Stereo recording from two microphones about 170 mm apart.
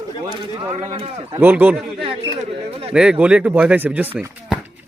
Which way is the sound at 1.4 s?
10° right (ahead or behind).